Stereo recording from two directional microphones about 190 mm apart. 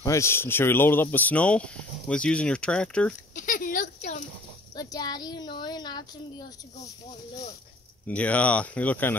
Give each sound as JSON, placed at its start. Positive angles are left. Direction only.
{"t": 0.0, "sound": "speech", "side_deg": 15}
{"t": 3.3, "sound": "a sound", "side_deg": 45}
{"t": 4.7, "sound": "a child's voice", "side_deg": 20}
{"t": 8.1, "sound": "speech", "side_deg": 5}